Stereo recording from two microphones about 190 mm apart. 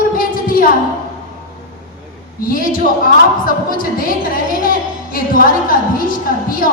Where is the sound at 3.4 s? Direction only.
50° left (ahead or behind).